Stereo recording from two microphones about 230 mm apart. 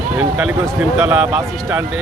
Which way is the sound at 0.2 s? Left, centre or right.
Centre.